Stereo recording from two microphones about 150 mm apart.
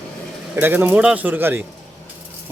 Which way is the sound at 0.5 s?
15° right (ahead or behind).